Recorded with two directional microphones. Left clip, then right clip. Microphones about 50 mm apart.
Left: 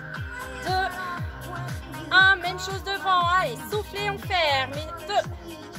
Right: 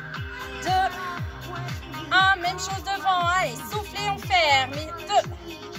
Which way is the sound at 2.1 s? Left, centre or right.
Left.